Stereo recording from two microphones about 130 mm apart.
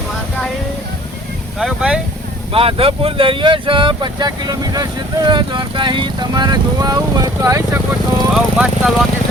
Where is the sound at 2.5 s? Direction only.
45° right (ahead or behind); by 7.6 s 25° right (ahead or behind).